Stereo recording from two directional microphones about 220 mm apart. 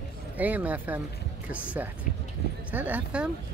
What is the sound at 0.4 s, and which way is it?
Speech, 5° right (ahead or behind).